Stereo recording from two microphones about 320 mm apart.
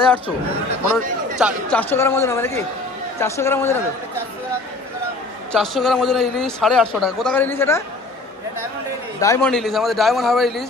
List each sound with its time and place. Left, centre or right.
1.4 s speech: centre
5.5 s a man's voice: centre
9.2 s a man's voice: centre